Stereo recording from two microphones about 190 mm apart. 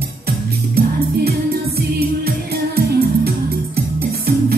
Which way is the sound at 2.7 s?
55° right (ahead or behind).